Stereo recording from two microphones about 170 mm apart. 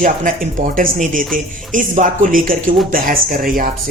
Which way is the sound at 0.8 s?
50° right (ahead or behind).